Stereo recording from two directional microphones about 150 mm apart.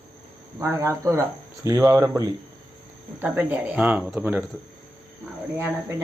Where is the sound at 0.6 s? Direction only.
20° right (ahead or behind).